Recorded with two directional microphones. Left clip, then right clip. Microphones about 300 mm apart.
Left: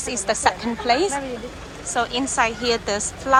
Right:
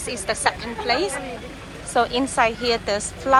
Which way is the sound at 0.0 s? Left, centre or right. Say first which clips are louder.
Left 2 dB; centre.